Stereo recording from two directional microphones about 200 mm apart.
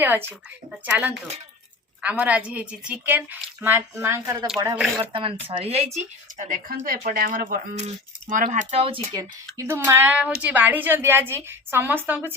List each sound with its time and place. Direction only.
0.7 s a woman's voice: 10° right (ahead or behind)
4.9 s speech: 25° right (ahead or behind); by 8.4 s 40° right (ahead or behind)
8.5 s speech: 30° right (ahead or behind)
9.6 s a woman's voice: 15° right (ahead or behind)